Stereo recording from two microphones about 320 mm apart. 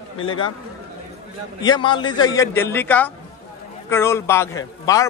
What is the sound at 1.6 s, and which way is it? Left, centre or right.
A man's voice, centre.